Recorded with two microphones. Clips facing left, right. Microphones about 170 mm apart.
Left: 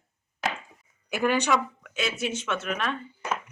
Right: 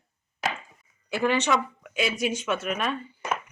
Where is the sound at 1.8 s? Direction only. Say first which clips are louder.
Right 3 dB; 10° right (ahead or behind).